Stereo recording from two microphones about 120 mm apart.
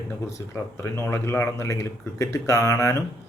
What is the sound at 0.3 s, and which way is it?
Speech, 25° left (ahead or behind).